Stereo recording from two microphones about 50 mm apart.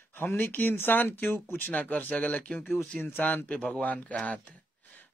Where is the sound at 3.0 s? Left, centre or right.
Left.